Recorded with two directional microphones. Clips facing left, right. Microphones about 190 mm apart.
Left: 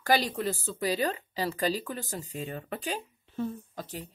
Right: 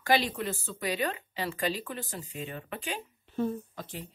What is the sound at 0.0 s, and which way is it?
Speech, 40° left (ahead or behind).